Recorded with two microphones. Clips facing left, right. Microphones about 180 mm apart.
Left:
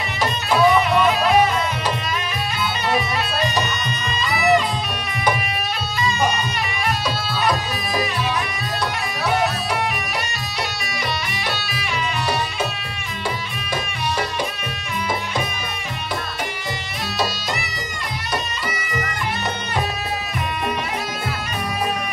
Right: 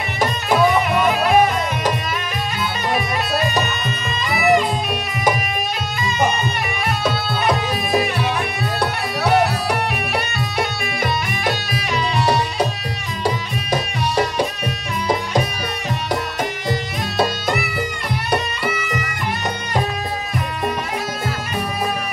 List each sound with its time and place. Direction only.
0.2 s music: 50° right (ahead or behind)
2.9 s bagpipes: 50° right (ahead or behind)
7.1 s music: 55° right (ahead or behind); by 14.2 s 40° right (ahead or behind)
17.2 s music: 55° right (ahead or behind)